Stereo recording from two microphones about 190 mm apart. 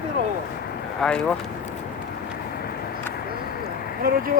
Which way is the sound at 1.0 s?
Centre (ahead or behind).